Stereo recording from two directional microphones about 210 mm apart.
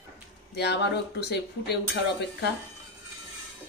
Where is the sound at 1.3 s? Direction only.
55° left (ahead or behind).